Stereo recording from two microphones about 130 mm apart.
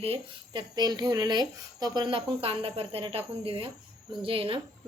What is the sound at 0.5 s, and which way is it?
Speech, 35° right (ahead or behind).